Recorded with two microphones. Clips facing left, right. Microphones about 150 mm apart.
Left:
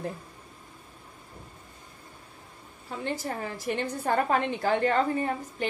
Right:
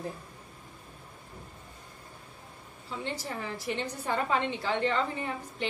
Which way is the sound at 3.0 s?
45° left (ahead or behind).